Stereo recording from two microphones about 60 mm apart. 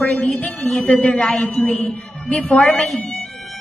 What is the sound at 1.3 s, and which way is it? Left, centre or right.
A woman's voice, centre.